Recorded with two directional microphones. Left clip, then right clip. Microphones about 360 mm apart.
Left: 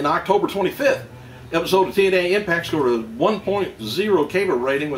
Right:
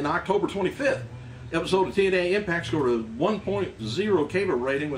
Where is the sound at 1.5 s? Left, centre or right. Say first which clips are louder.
Left 6 dB; centre.